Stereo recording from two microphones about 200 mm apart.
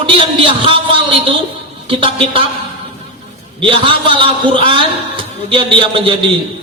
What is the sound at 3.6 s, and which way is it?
A man's voice, 25° right (ahead or behind).